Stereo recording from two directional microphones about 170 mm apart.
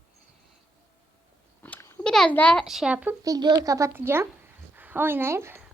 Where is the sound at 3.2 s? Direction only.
20° right (ahead or behind).